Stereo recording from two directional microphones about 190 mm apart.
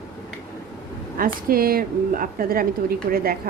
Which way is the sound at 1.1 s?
50° right (ahead or behind).